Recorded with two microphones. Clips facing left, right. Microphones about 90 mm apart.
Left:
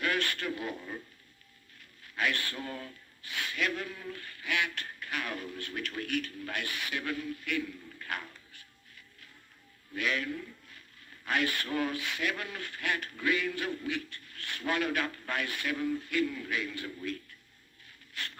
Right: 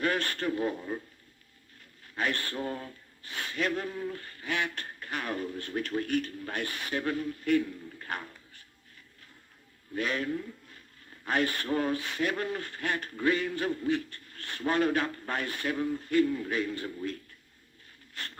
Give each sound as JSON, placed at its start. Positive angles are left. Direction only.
{"t": 0.0, "sound": "a man's voice", "side_deg": -35}
{"t": 2.1, "sound": "speech", "side_deg": -35}
{"t": 9.9, "sound": "a man's voice", "side_deg": -35}